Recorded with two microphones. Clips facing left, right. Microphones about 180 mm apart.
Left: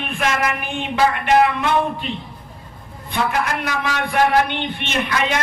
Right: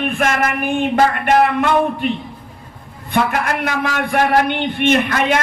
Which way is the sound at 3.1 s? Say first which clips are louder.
Right 3 dB; 55° right (ahead or behind).